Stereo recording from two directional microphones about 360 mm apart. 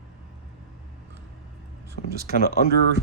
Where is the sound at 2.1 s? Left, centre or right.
Right.